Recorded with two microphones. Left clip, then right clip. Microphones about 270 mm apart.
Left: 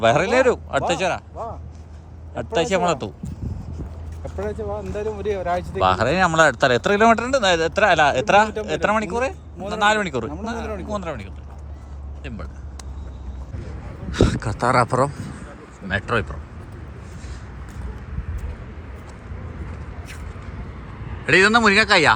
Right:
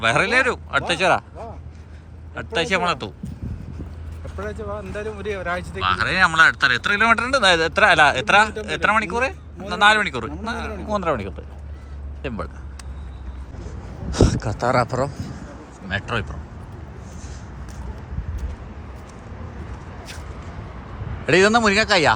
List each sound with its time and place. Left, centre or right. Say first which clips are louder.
0.0 s speech: left 1 dB; centre
4.4 s speech: left 2 dB; left
5.8 s speech: even; centre
14.1 s speech: even; centre
21.2 s speech: left 1 dB; centre